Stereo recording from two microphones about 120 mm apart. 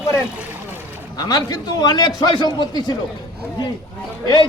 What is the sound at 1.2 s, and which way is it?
A man's voice, 30° left (ahead or behind).